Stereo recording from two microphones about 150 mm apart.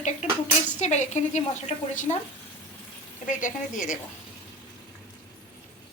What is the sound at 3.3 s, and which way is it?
Speech, 60° left (ahead or behind).